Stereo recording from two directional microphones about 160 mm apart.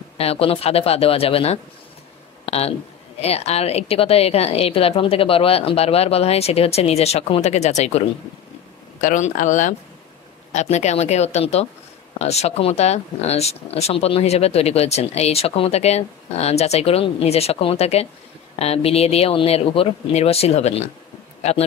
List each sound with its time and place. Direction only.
0.2 s speech: 35° left (ahead or behind)
2.4 s a sound: 40° left (ahead or behind)
3.2 s speech: 40° left (ahead or behind)
9.0 s a woman's voice: 50° left (ahead or behind)